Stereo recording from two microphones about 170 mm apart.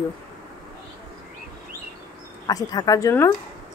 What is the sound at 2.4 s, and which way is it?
Speech, 20° left (ahead or behind).